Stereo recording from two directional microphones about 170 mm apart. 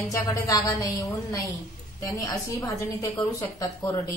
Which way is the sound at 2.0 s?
20° left (ahead or behind).